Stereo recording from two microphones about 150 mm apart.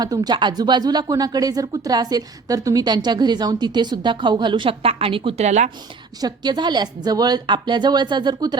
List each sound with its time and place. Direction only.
0.0 s speech: 25° right (ahead or behind)
5.5 s speech: 50° right (ahead or behind)
6.2 s speech: 30° right (ahead or behind)